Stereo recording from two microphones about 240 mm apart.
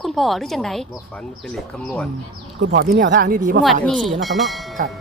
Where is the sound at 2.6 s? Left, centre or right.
Right.